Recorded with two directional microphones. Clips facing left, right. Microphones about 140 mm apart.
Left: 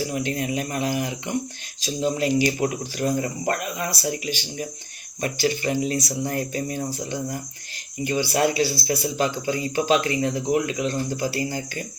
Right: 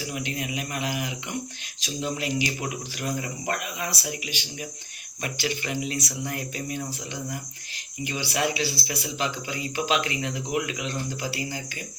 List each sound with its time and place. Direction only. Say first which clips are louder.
0.1 s speech: left 6 dB; 40° left (ahead or behind)